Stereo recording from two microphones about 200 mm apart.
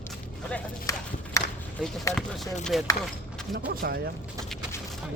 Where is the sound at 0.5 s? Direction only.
15° left (ahead or behind).